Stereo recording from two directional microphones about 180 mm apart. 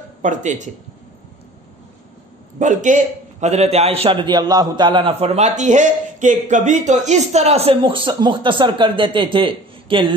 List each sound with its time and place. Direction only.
0.2 s a man's voice: 45° right (ahead or behind)
2.6 s a man's voice: 45° right (ahead or behind)